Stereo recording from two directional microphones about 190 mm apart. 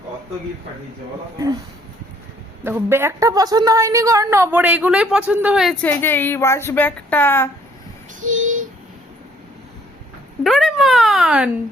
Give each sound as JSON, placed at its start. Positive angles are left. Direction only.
{"t": 2.6, "sound": "a woman's voice", "side_deg": -10}
{"t": 5.9, "sound": "a woman's voice", "side_deg": 10}
{"t": 8.2, "sound": "child singing", "side_deg": -40}
{"t": 10.4, "sound": "speech", "side_deg": 0}